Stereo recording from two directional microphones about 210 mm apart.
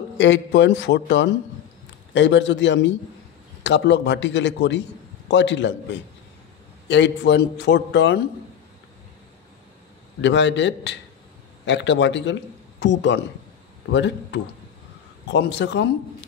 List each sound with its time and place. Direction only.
0.2 s a man's voice: 55° left (ahead or behind)
10.2 s a man's voice: 60° left (ahead or behind)